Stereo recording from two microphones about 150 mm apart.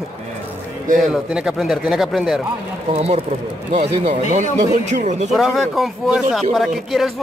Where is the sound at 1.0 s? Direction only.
5° right (ahead or behind).